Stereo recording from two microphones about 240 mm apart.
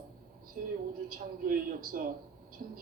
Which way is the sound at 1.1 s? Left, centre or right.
Right.